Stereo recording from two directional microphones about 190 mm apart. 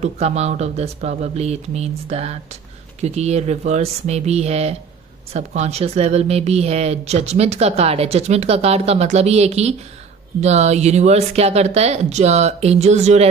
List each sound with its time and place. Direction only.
0.0 s speech: 35° right (ahead or behind)